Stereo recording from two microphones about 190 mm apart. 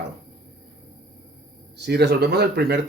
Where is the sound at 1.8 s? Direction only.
60° right (ahead or behind).